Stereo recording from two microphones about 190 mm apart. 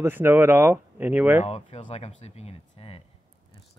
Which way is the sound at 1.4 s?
35° left (ahead or behind).